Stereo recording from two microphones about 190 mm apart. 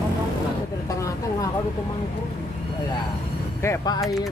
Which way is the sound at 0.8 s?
20° left (ahead or behind).